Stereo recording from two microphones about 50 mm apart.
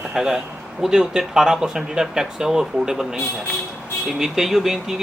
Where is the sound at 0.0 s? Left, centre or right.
Centre.